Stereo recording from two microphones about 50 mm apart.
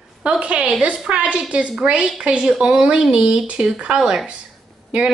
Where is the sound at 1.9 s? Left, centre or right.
Centre.